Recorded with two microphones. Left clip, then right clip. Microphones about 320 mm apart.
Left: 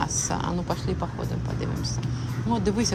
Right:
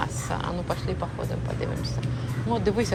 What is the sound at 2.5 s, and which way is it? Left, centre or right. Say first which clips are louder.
Speech: right 1 dB; centre.